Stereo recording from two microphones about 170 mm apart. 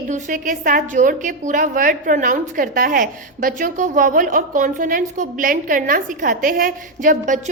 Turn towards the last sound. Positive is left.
turn(degrees=-50)  # may be behind; listen again after turning